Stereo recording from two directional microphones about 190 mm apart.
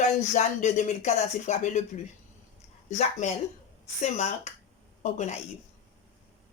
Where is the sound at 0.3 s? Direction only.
40° left (ahead or behind).